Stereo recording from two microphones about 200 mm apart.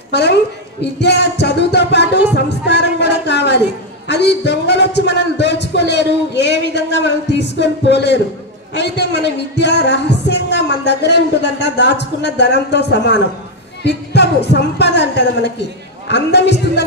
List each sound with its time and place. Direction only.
0.1 s a woman's voice: 60° left (ahead or behind)
0.9 s music: 60° left (ahead or behind)
4.1 s speech: 55° left (ahead or behind)